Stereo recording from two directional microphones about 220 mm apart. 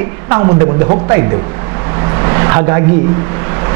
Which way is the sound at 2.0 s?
20° right (ahead or behind).